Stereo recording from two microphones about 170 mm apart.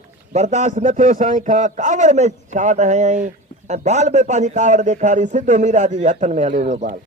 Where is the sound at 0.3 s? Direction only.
45° right (ahead or behind).